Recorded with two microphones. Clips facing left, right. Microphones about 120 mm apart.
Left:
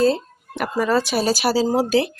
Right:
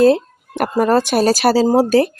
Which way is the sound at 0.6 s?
50° right (ahead or behind).